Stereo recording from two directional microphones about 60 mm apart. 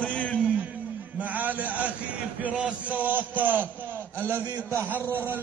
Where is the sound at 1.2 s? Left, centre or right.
Right.